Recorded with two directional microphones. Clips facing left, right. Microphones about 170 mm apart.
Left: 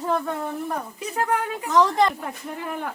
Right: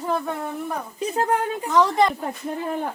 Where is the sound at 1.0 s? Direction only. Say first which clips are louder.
Right 3 dB; 30° right (ahead or behind).